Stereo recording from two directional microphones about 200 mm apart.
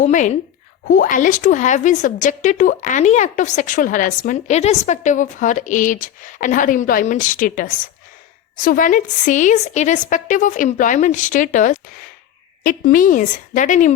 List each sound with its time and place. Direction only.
0.0 s a woman's voice: 35° left (ahead or behind)